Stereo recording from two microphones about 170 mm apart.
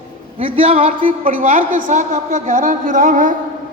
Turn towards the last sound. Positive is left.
turn(degrees=-50)  # may be behind; listen again after turning